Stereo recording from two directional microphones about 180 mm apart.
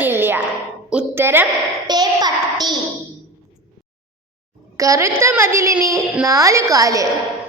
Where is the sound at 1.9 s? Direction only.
20° right (ahead or behind).